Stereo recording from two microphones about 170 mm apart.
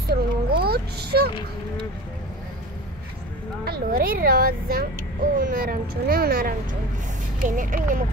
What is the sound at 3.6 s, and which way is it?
Speech, 60° right (ahead or behind).